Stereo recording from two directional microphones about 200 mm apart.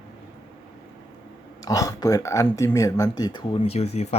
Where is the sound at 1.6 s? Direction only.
15° left (ahead or behind).